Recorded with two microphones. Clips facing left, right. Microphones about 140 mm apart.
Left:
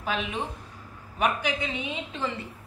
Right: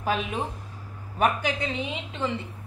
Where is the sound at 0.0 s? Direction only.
40° right (ahead or behind).